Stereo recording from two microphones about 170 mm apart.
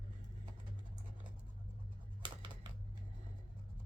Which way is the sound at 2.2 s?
30° right (ahead or behind).